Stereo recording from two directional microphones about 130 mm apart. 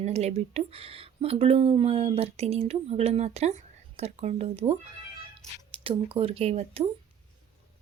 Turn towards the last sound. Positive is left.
turn(degrees=-50)  # may be behind; listen again after turning